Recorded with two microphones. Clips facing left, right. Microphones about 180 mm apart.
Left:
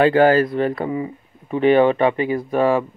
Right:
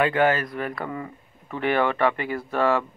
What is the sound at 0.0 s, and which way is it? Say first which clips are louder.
Speech: left 7 dB; 30° left (ahead or behind).